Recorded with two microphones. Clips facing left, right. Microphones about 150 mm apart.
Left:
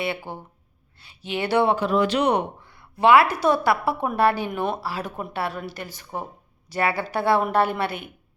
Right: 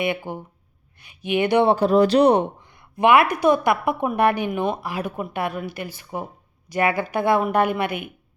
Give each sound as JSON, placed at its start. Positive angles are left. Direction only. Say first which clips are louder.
{"t": 0.3, "sound": "speech", "louder": "right 4 dB", "side_deg": -10}
{"t": 1.6, "sound": "speech", "louder": "right 4 dB", "side_deg": -35}
{"t": 2.9, "sound": "a woman's voice", "louder": "even", "side_deg": -15}